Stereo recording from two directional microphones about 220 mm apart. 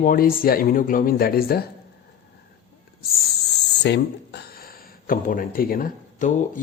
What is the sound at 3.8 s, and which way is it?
Speech, 50° left (ahead or behind).